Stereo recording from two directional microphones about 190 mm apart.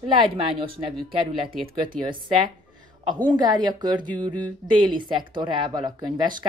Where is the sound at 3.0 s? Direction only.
20° right (ahead or behind).